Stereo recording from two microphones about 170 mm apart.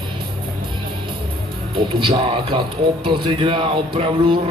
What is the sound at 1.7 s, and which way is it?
A man's voice, 30° right (ahead or behind).